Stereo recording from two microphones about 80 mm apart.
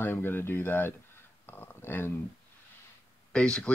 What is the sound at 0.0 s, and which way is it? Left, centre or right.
Speech, left.